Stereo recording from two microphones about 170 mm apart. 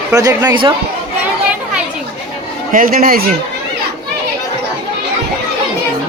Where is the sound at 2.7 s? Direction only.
55° right (ahead or behind).